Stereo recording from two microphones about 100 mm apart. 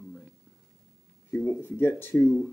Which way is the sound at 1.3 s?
20° left (ahead or behind).